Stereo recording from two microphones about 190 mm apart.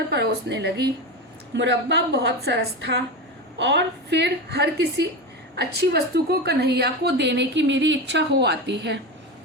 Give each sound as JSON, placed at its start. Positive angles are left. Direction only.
{"t": 0.1, "sound": "a woman's voice", "side_deg": -65}